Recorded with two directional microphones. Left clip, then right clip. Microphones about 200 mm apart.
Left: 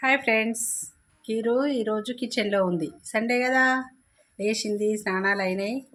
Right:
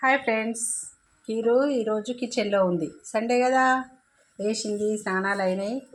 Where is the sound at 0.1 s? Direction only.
25° left (ahead or behind).